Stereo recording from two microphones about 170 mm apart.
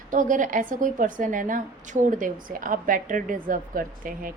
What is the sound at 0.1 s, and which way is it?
A woman's voice, 50° right (ahead or behind).